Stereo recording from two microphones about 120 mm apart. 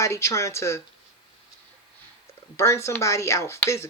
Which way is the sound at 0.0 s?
25° left (ahead or behind).